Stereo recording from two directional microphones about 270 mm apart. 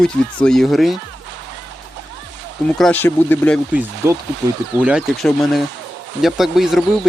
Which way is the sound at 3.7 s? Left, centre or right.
Centre.